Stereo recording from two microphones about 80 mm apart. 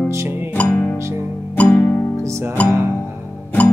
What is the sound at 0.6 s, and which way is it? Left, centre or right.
Music, left.